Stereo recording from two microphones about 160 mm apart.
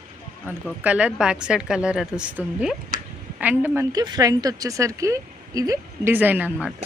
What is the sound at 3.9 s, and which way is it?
Speech, 25° right (ahead or behind).